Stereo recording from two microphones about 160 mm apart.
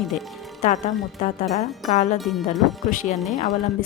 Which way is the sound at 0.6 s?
50° left (ahead or behind).